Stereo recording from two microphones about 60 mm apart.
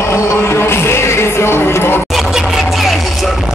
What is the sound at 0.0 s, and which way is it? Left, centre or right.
Music, left.